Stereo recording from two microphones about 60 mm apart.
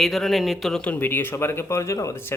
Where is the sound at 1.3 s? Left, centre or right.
Left.